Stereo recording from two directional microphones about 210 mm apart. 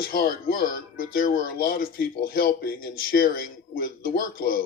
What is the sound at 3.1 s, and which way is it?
A man's voice, 45° left (ahead or behind).